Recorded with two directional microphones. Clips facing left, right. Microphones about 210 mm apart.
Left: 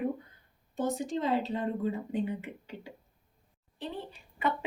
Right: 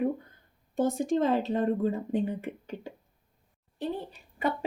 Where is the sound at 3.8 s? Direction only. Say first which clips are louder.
Right 6 dB; 40° right (ahead or behind).